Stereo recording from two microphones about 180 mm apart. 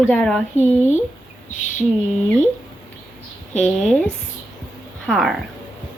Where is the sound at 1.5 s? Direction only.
45° left (ahead or behind).